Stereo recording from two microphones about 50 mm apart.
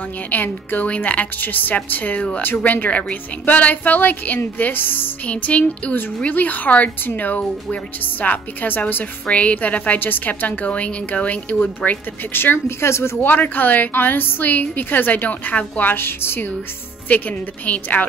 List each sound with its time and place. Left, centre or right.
0.3 s a woman's voice: left
5.2 s music: left
6.2 s a woman's voice: left
9.2 s a woman's voice: left
12.3 s a woman's voice: left
12.8 s speech: left
13.2 s a woman's voice: left
17.1 s a woman's voice: left